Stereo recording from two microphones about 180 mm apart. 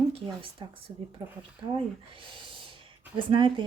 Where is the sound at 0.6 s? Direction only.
25° right (ahead or behind).